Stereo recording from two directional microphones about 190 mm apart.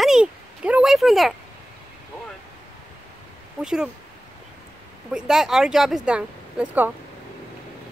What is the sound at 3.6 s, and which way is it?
Speech, 5° right (ahead or behind).